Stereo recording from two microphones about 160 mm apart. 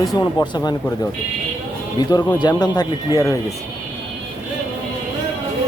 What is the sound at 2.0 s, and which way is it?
Speech, 25° left (ahead or behind).